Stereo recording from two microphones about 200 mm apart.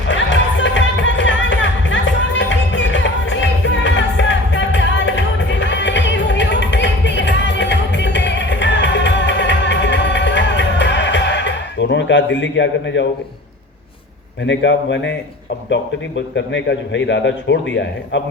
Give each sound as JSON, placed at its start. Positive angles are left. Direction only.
{"t": 0.1, "sound": "music", "side_deg": 65}
{"t": 14.4, "sound": "a man's voice", "side_deg": 60}
{"t": 16.3, "sound": "a man's voice", "side_deg": 65}